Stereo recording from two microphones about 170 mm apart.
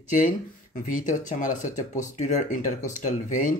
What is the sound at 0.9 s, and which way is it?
Speech, 50° left (ahead or behind).